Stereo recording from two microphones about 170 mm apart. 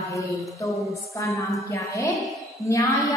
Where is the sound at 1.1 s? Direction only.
20° left (ahead or behind).